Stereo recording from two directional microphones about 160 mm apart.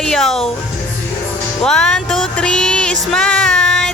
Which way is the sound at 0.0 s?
5° left (ahead or behind).